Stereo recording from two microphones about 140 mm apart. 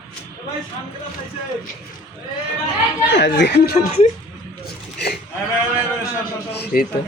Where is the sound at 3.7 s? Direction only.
50° left (ahead or behind).